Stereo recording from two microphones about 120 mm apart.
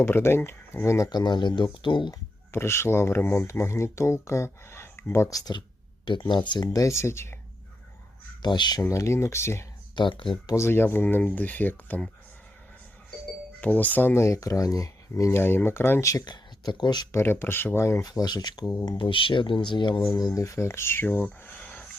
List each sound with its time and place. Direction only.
0.0 s speech: 20° left (ahead or behind); by 2.1 s 40° left (ahead or behind)
2.5 s speech: 20° left (ahead or behind)
6.1 s speech: 40° left (ahead or behind)
6.8 s speech: 20° left (ahead or behind)
8.4 s speech: 40° left (ahead or behind)
8.8 s speech: 25° left (ahead or behind)
9.9 s speech: 40° left (ahead or behind)
10.5 s speech: 20° left (ahead or behind)
13.6 s speech: 15° left (ahead or behind); by 17.2 s 35° left (ahead or behind)
17.2 s speech: 20° left (ahead or behind); by 20.0 s 40° left (ahead or behind)
20.1 s speech: 30° left (ahead or behind); by 21.8 s 15° left (ahead or behind)